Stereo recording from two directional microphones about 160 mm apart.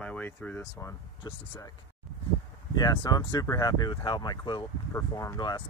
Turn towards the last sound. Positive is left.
turn(degrees=25)  # may be behind; listen again after turning